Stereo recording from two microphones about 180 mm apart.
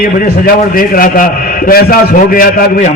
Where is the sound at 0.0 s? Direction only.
55° left (ahead or behind).